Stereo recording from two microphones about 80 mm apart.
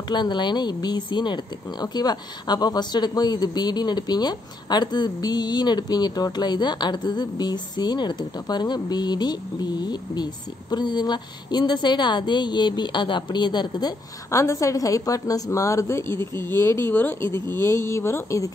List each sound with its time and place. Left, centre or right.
0.1 s speech: left
14.3 s a woman's voice: left